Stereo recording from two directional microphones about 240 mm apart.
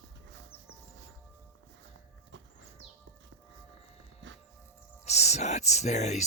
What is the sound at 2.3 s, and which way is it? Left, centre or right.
Music, right.